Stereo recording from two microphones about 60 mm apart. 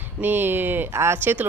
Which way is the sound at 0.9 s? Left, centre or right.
Right.